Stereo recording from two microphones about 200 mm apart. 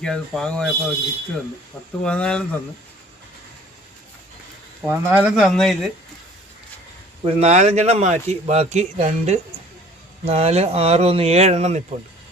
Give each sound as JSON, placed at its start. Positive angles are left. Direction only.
{"t": 0.0, "sound": "speech", "side_deg": 5}
{"t": 2.0, "sound": "speech", "side_deg": 5}
{"t": 4.9, "sound": "speech", "side_deg": -10}
{"t": 7.3, "sound": "a man's voice", "side_deg": -30}